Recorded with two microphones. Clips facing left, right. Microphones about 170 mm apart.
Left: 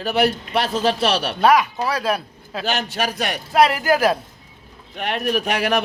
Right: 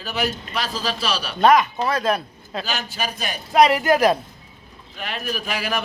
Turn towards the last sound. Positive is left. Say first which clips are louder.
# left 6 dB
turn(degrees=65)  # may be behind; listen again after turning